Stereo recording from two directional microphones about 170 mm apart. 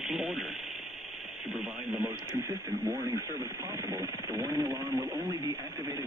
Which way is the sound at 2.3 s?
20° right (ahead or behind).